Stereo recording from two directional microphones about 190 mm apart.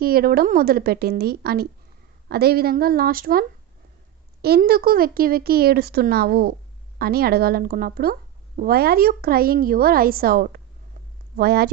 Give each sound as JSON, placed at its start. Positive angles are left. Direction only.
{"t": 0.0, "sound": "speech", "side_deg": -50}
{"t": 4.4, "sound": "speech", "side_deg": -55}